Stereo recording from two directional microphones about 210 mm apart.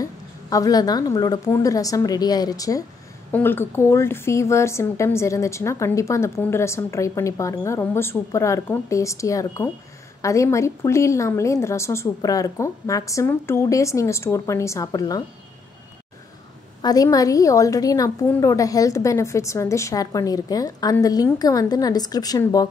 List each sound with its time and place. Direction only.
0.0 s a woman's voice: 15° left (ahead or behind)
16.8 s a woman's voice: 15° left (ahead or behind)